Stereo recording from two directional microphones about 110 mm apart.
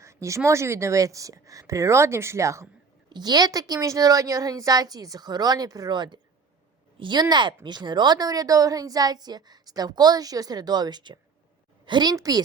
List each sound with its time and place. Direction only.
0.0 s speech: 25° right (ahead or behind)
3.1 s a woman's voice: 40° right (ahead or behind)
12.1 s a woman's voice: 30° right (ahead or behind)